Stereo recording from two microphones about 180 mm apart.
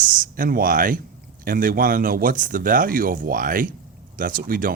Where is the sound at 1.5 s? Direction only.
50° right (ahead or behind).